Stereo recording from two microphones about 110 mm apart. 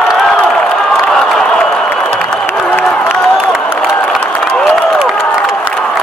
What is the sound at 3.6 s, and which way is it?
Crowd, 5° left (ahead or behind).